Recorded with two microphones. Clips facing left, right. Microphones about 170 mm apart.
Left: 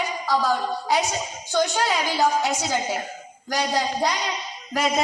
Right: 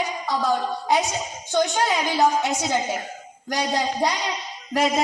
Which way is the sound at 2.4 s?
20° right (ahead or behind).